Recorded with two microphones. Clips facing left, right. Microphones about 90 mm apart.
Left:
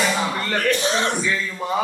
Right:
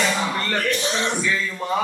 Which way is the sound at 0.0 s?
5° left (ahead or behind).